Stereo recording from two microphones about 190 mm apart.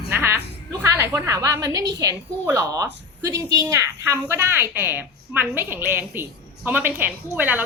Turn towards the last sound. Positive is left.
turn(degrees=-10)  # may be behind; listen again after turning